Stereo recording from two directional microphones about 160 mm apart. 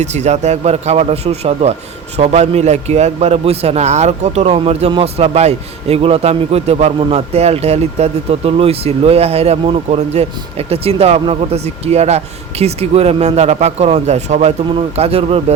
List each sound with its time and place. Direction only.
0.0 s a man's voice: 45° right (ahead or behind)